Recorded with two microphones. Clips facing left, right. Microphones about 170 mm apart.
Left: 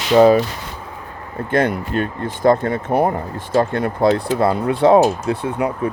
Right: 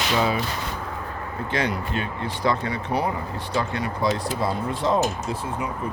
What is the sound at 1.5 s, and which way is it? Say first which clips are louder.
Speech: left 8 dB; 50° left (ahead or behind).